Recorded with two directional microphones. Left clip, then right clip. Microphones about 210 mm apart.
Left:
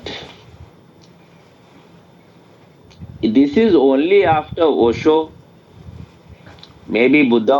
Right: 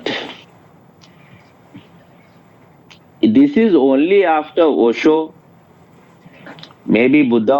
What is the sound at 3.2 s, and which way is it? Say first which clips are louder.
Speech: right 2 dB; 50° right (ahead or behind).